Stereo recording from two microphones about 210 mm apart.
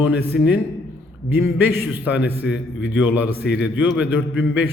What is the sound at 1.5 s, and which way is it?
Speech, 10° right (ahead or behind).